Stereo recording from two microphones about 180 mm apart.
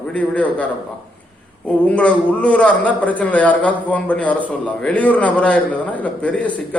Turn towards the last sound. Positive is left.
turn(degrees=5)  # may be behind; listen again after turning